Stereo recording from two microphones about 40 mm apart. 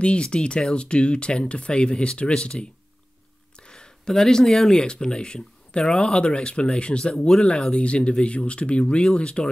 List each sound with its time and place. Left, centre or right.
0.0 s speech: left